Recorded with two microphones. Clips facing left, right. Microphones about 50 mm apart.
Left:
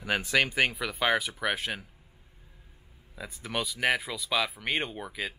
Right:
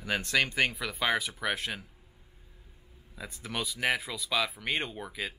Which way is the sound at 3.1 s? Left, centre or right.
Centre.